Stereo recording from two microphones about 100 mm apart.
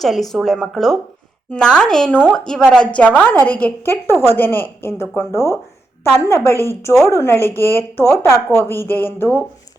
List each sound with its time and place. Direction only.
0.0 s a woman's voice: centre (ahead or behind); by 9.4 s 20° left (ahead or behind)